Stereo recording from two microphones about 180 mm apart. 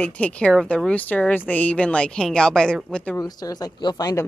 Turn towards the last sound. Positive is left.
turn(degrees=20)  # may be behind; listen again after turning